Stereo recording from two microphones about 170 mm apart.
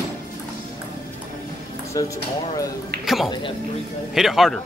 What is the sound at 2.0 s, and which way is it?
Speech, 20° left (ahead or behind).